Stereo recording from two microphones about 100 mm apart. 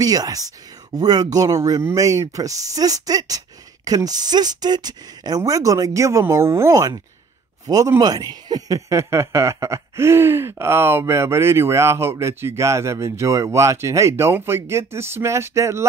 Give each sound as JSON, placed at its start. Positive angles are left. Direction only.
{"t": 0.0, "sound": "speech", "side_deg": -40}